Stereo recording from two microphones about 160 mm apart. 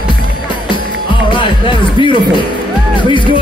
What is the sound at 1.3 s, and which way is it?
Music, 30° left (ahead or behind).